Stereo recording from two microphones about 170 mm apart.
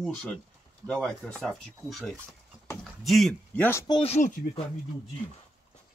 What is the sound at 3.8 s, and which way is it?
Speech, 30° left (ahead or behind).